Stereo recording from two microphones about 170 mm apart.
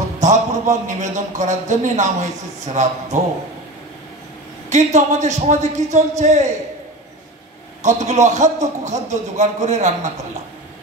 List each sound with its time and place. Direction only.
0.2 s a man's voice: 45° right (ahead or behind)
4.6 s a man's voice: 45° right (ahead or behind)
7.8 s a man's voice: 45° right (ahead or behind)